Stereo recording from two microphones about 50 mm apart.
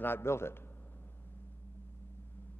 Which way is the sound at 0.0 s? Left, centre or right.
Left.